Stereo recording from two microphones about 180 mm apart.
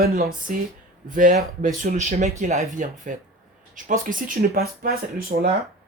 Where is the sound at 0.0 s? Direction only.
55° right (ahead or behind).